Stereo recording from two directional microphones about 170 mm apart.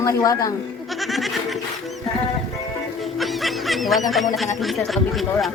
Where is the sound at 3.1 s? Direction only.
Centre (ahead or behind).